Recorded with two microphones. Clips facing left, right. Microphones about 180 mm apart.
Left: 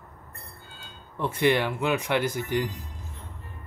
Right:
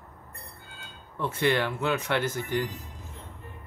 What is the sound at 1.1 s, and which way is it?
Speech, 15° left (ahead or behind).